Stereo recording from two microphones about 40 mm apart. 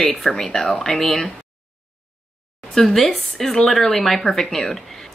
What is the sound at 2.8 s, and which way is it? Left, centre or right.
A woman's voice, centre.